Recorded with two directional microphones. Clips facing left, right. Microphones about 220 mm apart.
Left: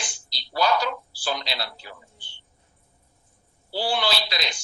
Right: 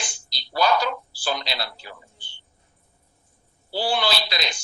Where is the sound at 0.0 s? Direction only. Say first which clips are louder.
Right 1 dB; 50° right (ahead or behind).